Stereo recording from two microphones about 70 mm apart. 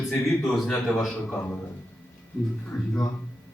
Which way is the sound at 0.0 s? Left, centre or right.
Centre.